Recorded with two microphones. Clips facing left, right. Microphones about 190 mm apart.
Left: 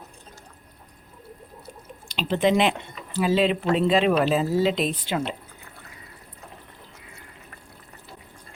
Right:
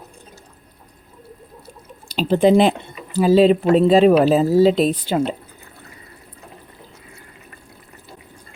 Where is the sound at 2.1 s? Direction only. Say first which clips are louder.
Right 7 dB; 35° right (ahead or behind).